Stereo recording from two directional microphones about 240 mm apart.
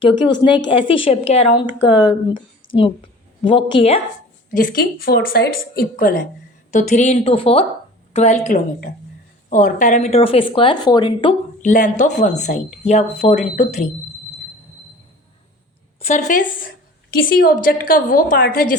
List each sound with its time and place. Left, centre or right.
0.0 s a woman's voice: centre
4.5 s a woman's voice: left; by 11.3 s centre
11.6 s speech: left
16.0 s a woman's voice: left